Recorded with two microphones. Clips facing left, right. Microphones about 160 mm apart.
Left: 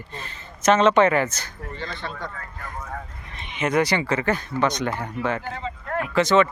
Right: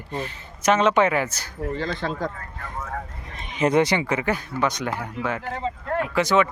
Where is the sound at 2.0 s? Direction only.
90° right.